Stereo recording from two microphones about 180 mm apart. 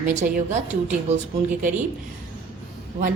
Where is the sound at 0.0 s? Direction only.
40° right (ahead or behind).